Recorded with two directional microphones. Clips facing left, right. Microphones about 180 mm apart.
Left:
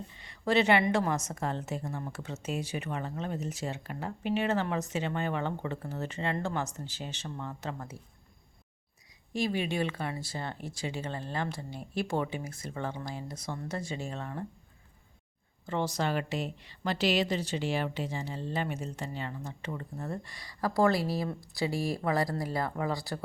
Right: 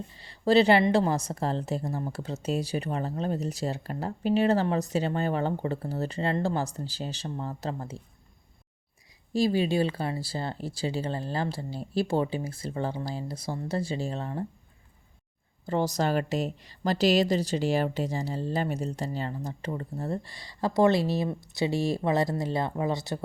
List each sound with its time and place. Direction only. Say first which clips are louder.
0.1 s a woman's voice: right 6 dB; 35° right (ahead or behind)
9.3 s a woman's voice: right 6 dB; 35° right (ahead or behind)
15.6 s a woman's voice: right 4 dB; 40° right (ahead or behind); by 23.2 s 20° right (ahead or behind)